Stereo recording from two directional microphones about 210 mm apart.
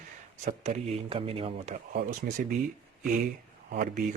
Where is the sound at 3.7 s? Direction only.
50° right (ahead or behind).